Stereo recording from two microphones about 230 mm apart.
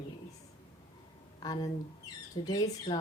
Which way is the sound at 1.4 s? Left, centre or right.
Centre.